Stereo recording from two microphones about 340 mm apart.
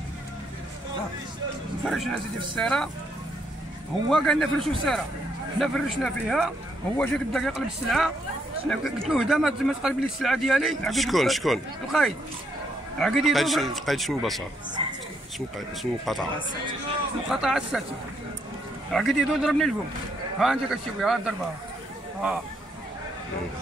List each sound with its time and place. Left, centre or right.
1.9 s a man's voice: centre
4.1 s a man's voice: centre
14.8 s a woman's voice: centre
15.3 s a man's voice: centre
17.3 s a man's voice: centre
18.9 s a man's voice: centre